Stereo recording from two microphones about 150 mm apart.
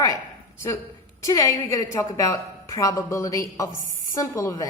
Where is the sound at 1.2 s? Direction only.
20° left (ahead or behind).